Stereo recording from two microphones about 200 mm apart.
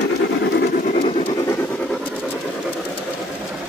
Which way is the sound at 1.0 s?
30° left (ahead or behind).